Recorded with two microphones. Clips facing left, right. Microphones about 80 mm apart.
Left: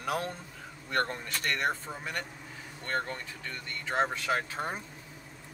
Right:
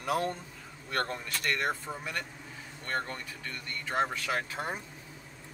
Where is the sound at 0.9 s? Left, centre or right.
Left.